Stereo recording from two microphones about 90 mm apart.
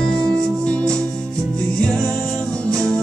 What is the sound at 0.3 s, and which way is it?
Music, 10° left (ahead or behind).